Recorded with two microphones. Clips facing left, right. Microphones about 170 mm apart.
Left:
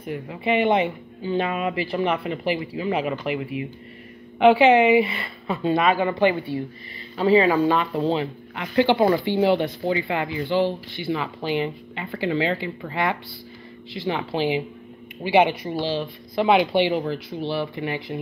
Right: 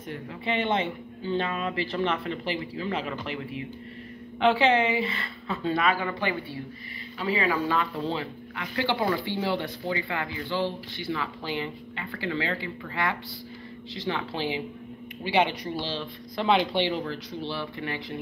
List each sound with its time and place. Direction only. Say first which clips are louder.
0.0 s speech: left 6 dB; 10° left (ahead or behind)
7.2 s speech: left 9 dB; 30° left (ahead or behind); by 18.2 s 15° left (ahead or behind)